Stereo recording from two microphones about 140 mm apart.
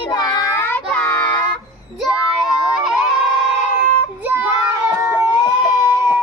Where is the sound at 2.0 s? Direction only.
5° right (ahead or behind).